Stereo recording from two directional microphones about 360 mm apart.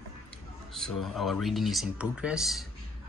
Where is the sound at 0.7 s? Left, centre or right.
Centre.